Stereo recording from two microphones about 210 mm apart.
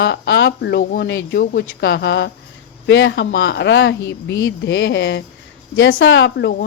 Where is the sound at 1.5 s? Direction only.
65° left (ahead or behind).